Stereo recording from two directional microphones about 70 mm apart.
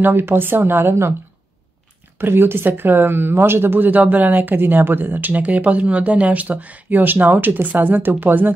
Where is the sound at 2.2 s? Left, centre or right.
Right.